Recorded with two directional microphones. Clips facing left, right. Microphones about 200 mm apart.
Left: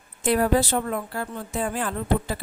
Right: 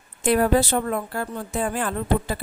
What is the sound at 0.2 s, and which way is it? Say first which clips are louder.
A woman's voice: right 2 dB; 55° right (ahead or behind).